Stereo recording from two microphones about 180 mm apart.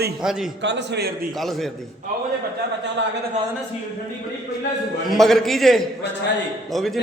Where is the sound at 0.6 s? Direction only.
75° right (ahead or behind).